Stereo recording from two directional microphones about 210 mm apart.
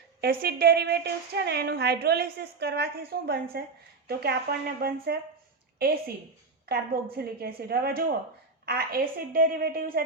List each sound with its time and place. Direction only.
0.2 s a woman's voice: 50° right (ahead or behind)